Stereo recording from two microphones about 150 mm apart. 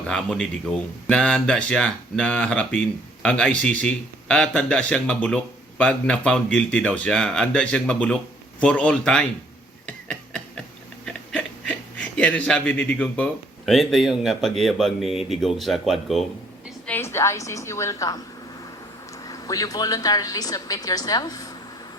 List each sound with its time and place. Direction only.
0.1 s speech: 5° left (ahead or behind)
9.8 s a sound: 5° left (ahead or behind)
13.7 s speech: centre (ahead or behind)
16.8 s a woman's voice: 15° left (ahead or behind)
19.3 s a woman's voice: 25° left (ahead or behind)